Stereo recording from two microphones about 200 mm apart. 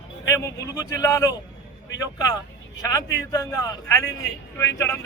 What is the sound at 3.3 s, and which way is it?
A man's voice, 20° left (ahead or behind).